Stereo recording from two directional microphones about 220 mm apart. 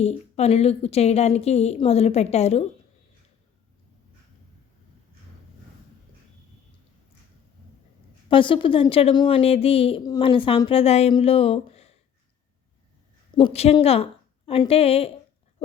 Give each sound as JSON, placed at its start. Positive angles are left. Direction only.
{"t": 0.3, "sound": "a woman's voice", "side_deg": 30}
{"t": 8.3, "sound": "a woman's voice", "side_deg": 20}
{"t": 13.3, "sound": "a woman's voice", "side_deg": 25}